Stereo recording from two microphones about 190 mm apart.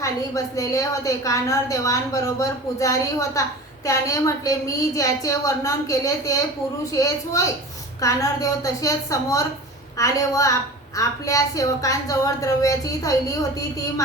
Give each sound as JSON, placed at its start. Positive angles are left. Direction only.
{"t": 0.0, "sound": "a woman's voice", "side_deg": 15}